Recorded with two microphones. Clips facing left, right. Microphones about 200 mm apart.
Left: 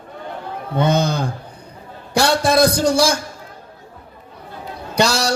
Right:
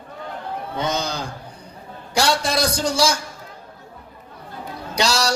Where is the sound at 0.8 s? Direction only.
55° left (ahead or behind).